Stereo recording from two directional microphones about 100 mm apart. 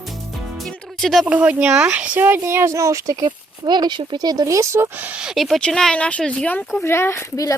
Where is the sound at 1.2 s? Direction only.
15° right (ahead or behind); by 3.3 s 35° right (ahead or behind).